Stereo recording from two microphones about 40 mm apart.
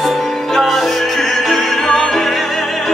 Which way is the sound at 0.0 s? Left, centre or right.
Centre.